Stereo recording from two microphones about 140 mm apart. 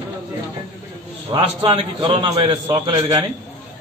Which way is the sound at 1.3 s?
40° right (ahead or behind).